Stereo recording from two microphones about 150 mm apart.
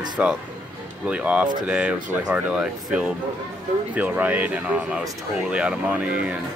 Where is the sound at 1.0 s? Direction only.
10° right (ahead or behind).